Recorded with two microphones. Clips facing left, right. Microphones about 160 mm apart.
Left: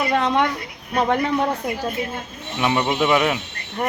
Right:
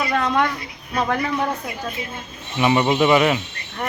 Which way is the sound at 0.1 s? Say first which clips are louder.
Left 1 dB; 20° left (ahead or behind).